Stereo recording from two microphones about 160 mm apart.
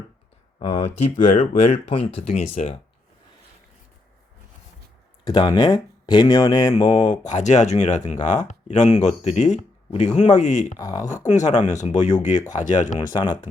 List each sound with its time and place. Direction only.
0.6 s speech: 40° left (ahead or behind)
5.2 s speech: 25° left (ahead or behind)
6.7 s speech: 45° left (ahead or behind)
10.8 s speech: 20° left (ahead or behind)
11.3 s speech: 50° left (ahead or behind)